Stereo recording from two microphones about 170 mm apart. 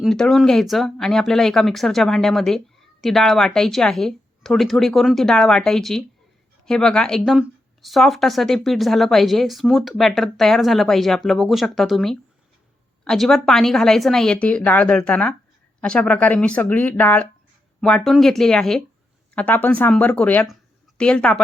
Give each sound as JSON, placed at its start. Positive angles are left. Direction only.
{"t": 0.0, "sound": "speech", "side_deg": 0}